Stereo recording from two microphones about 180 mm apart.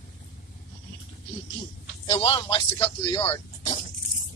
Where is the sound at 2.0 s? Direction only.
30° left (ahead or behind).